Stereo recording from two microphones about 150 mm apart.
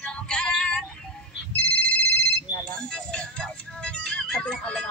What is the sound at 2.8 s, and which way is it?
Music, 5° left (ahead or behind).